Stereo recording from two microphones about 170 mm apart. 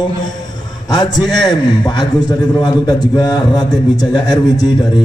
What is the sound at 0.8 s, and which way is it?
A man's voice, 25° left (ahead or behind).